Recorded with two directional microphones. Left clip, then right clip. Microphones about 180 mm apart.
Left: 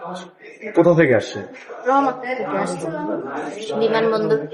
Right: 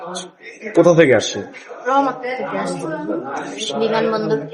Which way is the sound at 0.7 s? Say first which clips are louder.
Right 3 dB; 35° right (ahead or behind).